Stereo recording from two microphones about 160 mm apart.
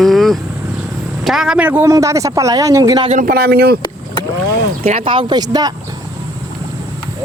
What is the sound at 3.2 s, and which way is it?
Speech, 70° right (ahead or behind).